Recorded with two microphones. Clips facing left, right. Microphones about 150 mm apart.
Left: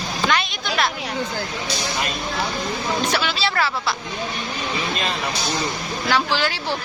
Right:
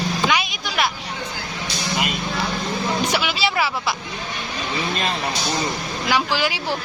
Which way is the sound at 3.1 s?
10° right (ahead or behind).